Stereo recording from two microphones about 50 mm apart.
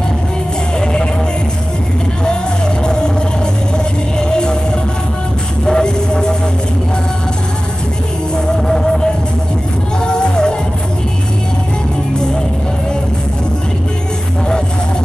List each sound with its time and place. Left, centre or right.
2.2 s music: centre
8.6 s music: centre